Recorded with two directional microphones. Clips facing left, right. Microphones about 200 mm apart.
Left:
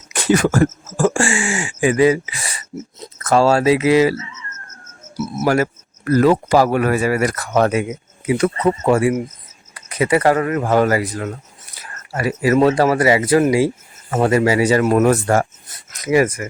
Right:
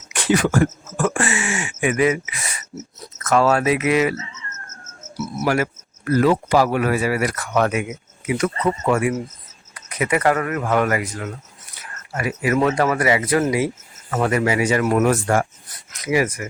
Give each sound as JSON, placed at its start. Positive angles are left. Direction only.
{"t": 0.1, "sound": "speech", "side_deg": 40}
{"t": 5.5, "sound": "speech", "side_deg": 40}
{"t": 11.7, "sound": "a sound", "side_deg": 35}
{"t": 12.5, "sound": "speech", "side_deg": 30}
{"t": 15.0, "sound": "speech", "side_deg": 40}
{"t": 15.9, "sound": "a sound", "side_deg": 45}